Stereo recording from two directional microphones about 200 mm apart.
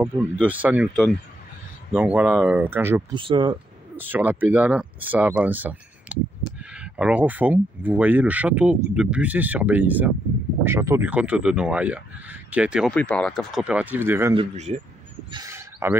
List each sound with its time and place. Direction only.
0.0 s speech: 10° right (ahead or behind)
3.2 s speech: 25° right (ahead or behind)
4.1 s speech: 10° right (ahead or behind)
12.9 s speech: 5° left (ahead or behind); by 14.3 s 10° right (ahead or behind)
14.3 s speech: 30° right (ahead or behind)
15.3 s a sound: 15° right (ahead or behind)